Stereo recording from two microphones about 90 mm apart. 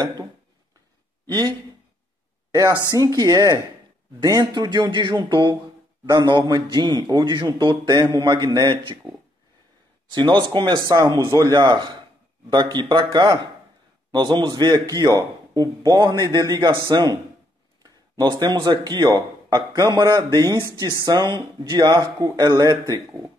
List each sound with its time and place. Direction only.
0.0 s a man's voice: 45° right (ahead or behind)
2.7 s a man's voice: 50° right (ahead or behind)
10.1 s speech: 55° right (ahead or behind)
10.9 s a man's voice: 50° right (ahead or behind)
18.4 s a man's voice: 50° right (ahead or behind)